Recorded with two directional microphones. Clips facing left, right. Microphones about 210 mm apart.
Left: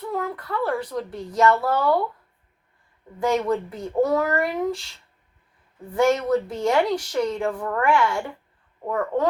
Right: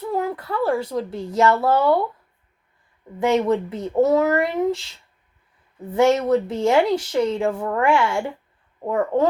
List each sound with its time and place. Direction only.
0.0 s speech: 30° right (ahead or behind)
3.2 s speech: 25° right (ahead or behind)
5.9 s speech: 25° right (ahead or behind)